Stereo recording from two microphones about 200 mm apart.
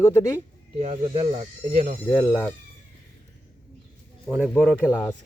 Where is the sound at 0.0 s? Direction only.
15° left (ahead or behind).